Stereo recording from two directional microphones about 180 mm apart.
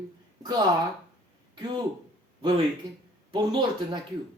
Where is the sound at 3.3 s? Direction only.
25° right (ahead or behind).